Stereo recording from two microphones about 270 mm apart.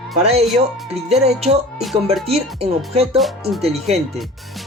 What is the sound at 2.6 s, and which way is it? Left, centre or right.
Music, right.